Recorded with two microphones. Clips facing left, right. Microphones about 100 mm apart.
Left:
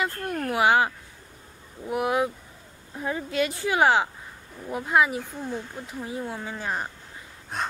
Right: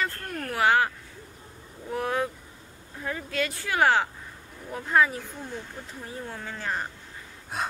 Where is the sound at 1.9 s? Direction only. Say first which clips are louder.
Left 3 dB; 15° left (ahead or behind).